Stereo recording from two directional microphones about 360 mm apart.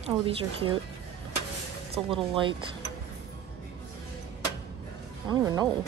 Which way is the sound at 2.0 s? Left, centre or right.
Centre.